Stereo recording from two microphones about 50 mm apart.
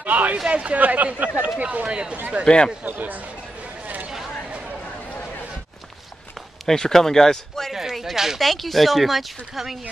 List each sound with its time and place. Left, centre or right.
0.0 s a sound: right
0.5 s speech: right
2.4 s speech: centre
2.8 s speech: right
3.8 s a sound: right
6.6 s speech: centre
7.7 s speech: centre